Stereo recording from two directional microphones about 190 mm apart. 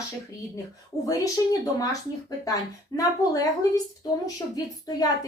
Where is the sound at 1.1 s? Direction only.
20° left (ahead or behind).